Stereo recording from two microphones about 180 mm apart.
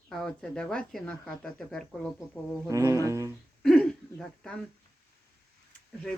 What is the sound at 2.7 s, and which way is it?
Brass instrument, 15° right (ahead or behind).